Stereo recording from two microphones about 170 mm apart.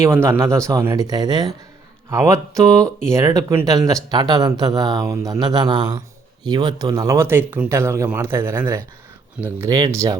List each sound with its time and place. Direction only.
0.0 s speech: 15° right (ahead or behind)